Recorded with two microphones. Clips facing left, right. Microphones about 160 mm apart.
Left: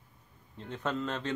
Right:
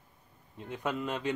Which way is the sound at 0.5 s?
10° right (ahead or behind).